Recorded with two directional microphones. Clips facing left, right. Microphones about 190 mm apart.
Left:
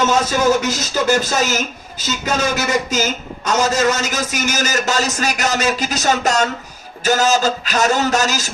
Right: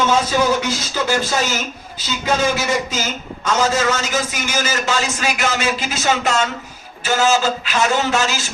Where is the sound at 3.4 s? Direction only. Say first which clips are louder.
Left 1 dB; 40° left (ahead or behind).